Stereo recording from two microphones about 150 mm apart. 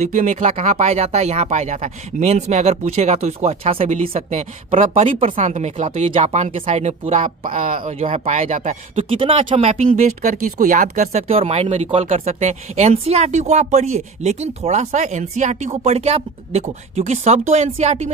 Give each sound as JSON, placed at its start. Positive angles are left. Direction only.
{"t": 0.1, "sound": "speech", "side_deg": -55}
{"t": 5.4, "sound": "speech", "side_deg": -55}
{"t": 5.9, "sound": "speech", "side_deg": -35}
{"t": 6.2, "sound": "speech", "side_deg": -50}
{"t": 7.4, "sound": "speech", "side_deg": -65}
{"t": 8.9, "sound": "speech", "side_deg": -40}